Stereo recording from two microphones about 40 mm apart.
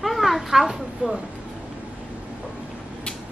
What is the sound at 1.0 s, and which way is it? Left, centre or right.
Speech, right.